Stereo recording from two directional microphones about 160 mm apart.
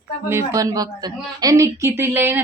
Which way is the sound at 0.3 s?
20° right (ahead or behind).